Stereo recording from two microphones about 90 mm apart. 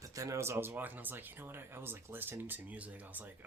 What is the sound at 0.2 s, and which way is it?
Speech, 35° right (ahead or behind).